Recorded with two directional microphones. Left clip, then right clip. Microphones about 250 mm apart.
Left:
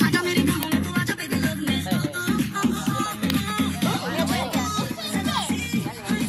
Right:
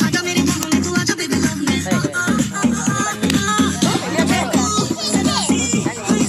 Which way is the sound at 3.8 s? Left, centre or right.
Right.